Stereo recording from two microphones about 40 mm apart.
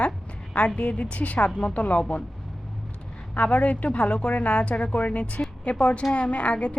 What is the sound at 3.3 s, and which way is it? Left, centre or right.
Speech, left.